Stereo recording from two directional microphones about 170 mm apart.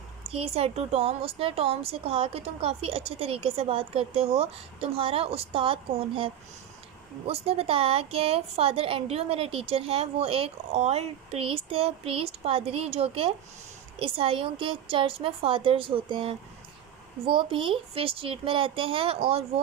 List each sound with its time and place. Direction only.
0.3 s a woman's voice: 35° right (ahead or behind)